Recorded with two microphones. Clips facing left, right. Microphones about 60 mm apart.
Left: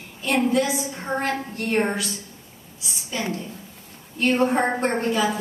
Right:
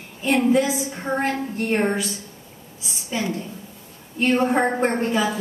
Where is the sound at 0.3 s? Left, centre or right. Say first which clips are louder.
Right 2 dB; centre.